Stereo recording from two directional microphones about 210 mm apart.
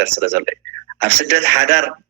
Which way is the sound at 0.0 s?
55° right (ahead or behind).